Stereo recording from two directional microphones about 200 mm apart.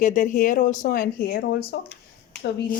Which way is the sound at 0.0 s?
40° left (ahead or behind).